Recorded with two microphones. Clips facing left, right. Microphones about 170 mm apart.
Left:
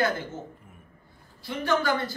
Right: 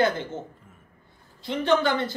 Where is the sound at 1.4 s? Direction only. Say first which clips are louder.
Right 4 dB; 25° right (ahead or behind).